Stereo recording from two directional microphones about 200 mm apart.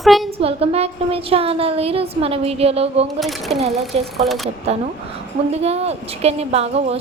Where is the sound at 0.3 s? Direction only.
30° right (ahead or behind).